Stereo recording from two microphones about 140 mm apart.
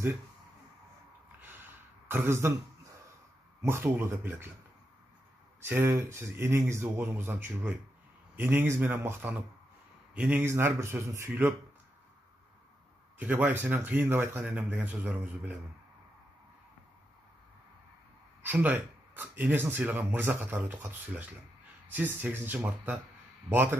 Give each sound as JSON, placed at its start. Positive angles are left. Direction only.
{"t": 1.4, "sound": "a sound", "side_deg": -15}
{"t": 3.6, "sound": "speech", "side_deg": -15}
{"t": 5.7, "sound": "speech", "side_deg": -15}
{"t": 13.2, "sound": "speech", "side_deg": -10}
{"t": 18.5, "sound": "speech", "side_deg": -15}